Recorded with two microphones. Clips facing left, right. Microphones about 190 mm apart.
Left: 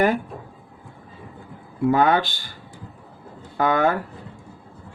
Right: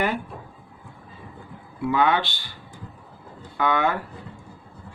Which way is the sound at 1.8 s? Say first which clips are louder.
Left 3 dB; 45° left (ahead or behind).